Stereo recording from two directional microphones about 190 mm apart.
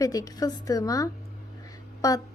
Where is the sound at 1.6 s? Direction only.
20° left (ahead or behind).